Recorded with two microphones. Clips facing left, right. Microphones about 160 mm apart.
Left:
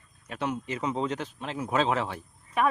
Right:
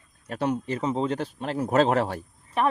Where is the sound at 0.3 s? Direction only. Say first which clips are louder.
Right 5 dB; 35° right (ahead or behind).